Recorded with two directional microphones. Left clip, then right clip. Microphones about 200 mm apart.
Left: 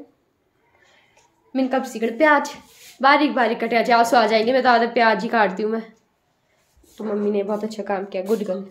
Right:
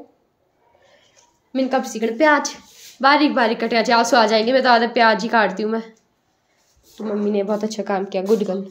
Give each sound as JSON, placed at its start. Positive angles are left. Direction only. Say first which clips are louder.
{"t": 1.5, "sound": "a woman's voice", "louder": "right 2 dB", "side_deg": -10}
{"t": 7.2, "sound": "a woman's voice", "louder": "right 3 dB", "side_deg": -15}